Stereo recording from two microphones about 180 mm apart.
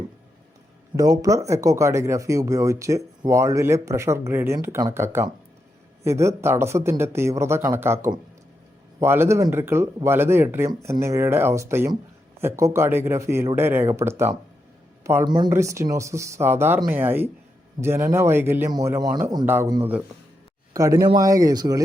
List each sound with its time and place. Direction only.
0.9 s speech: 20° right (ahead or behind)
9.0 s speech: 15° right (ahead or behind)